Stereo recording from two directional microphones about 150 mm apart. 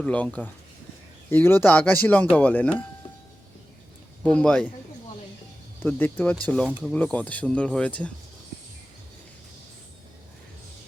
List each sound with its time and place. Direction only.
0.0 s speech: 10° left (ahead or behind)
4.2 s speech: 5° left (ahead or behind)
5.8 s speech: 10° left (ahead or behind)